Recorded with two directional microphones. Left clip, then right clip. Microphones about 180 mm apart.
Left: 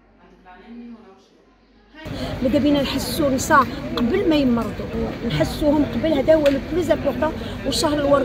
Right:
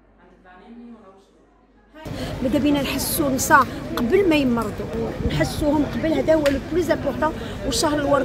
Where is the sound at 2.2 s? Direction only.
10° right (ahead or behind).